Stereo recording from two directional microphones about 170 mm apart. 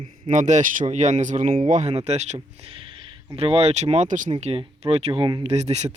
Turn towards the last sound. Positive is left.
turn(degrees=-40)  # may be behind; listen again after turning